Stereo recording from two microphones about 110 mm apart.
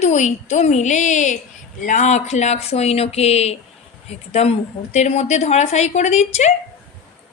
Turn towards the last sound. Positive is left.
turn(degrees=90)